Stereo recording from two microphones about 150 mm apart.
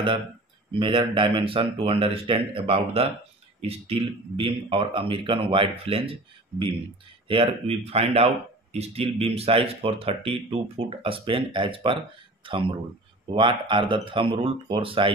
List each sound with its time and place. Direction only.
0.7 s speech: 35° right (ahead or behind)
7.2 s speech: 40° right (ahead or behind)
13.3 s speech: 35° right (ahead or behind)